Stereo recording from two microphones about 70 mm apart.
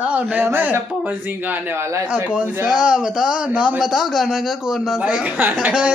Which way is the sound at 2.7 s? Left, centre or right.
Centre.